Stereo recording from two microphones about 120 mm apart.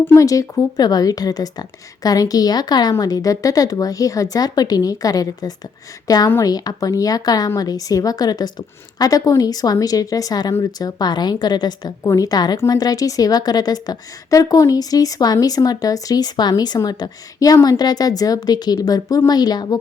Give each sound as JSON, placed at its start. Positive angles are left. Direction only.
{"t": 0.0, "sound": "speech", "side_deg": 15}
{"t": 0.3, "sound": "a woman's voice", "side_deg": 30}